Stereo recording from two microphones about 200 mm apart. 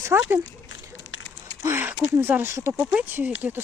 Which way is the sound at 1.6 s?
10° right (ahead or behind).